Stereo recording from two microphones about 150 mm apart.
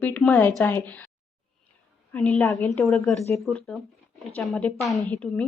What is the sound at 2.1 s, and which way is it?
A woman's voice, 10° left (ahead or behind).